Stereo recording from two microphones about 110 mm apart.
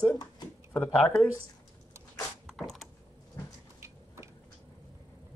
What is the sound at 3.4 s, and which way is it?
Vehicle, 30° left (ahead or behind).